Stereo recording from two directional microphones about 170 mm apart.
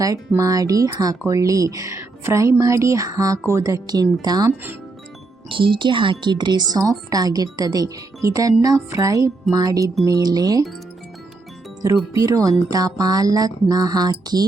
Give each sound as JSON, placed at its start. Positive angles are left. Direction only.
{"t": 0.0, "sound": "speech", "side_deg": -20}
{"t": 12.1, "sound": "speech", "side_deg": -20}